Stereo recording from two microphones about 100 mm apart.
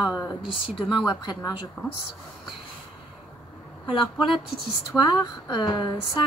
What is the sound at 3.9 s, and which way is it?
A woman's voice, 55° left (ahead or behind).